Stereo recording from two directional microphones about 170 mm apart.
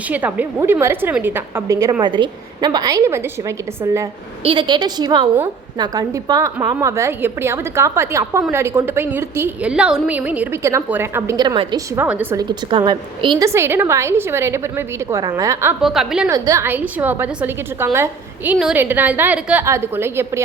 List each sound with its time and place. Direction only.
0.1 s a woman's voice: 10° right (ahead or behind)
4.4 s a woman's voice: 30° right (ahead or behind)
11.9 s a woman's voice: 10° right (ahead or behind)
12.4 s a woman's voice: 25° right (ahead or behind)
13.5 s a woman's voice: 15° right (ahead or behind)
15.8 s a woman's voice: centre (ahead or behind)
16.3 s a woman's voice: 20° right (ahead or behind)